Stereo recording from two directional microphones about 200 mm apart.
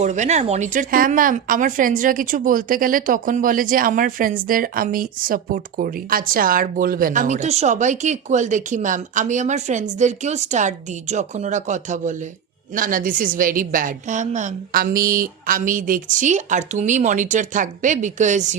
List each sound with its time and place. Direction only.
0.0 s speech: 35° right (ahead or behind)